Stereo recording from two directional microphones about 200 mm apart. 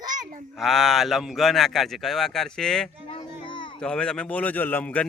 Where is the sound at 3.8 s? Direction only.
5° left (ahead or behind).